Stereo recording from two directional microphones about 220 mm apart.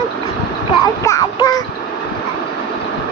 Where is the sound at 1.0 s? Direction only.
15° left (ahead or behind).